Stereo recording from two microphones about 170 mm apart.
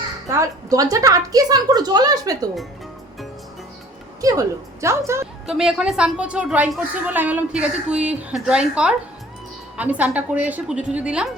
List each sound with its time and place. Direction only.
0.3 s a woman's voice: 20° right (ahead or behind)
4.2 s a woman's voice: 20° right (ahead or behind)
5.5 s a woman's voice: 5° right (ahead or behind)